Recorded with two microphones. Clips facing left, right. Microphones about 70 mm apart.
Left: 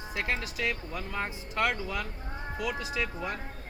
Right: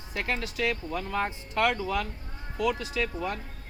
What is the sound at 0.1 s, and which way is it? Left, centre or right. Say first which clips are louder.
Speech: right 2 dB; centre.